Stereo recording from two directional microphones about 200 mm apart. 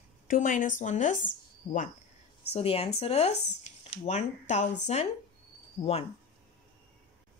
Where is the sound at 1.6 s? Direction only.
25° left (ahead or behind).